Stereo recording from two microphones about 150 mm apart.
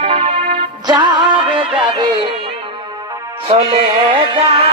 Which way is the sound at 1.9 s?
30° right (ahead or behind).